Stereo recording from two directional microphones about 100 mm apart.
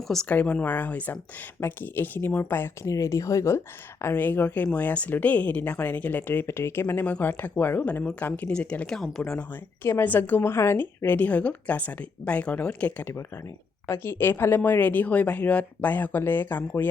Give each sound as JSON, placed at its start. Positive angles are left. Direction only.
{"t": 0.3, "sound": "speech", "side_deg": 15}
{"t": 13.8, "sound": "speech", "side_deg": 25}